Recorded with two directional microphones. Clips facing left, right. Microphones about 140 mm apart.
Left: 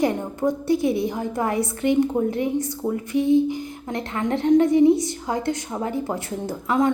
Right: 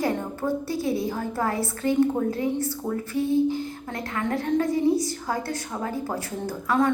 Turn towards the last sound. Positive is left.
turn(degrees=20)  # may be behind; listen again after turning